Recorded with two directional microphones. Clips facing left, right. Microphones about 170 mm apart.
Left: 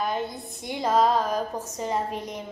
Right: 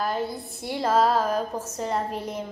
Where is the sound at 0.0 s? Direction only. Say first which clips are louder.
Right 1 dB; 5° right (ahead or behind).